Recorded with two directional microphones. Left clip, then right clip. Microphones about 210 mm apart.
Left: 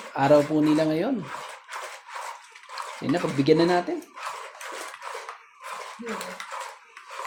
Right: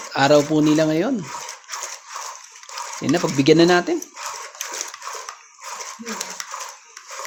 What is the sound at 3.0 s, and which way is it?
Speech, 35° right (ahead or behind).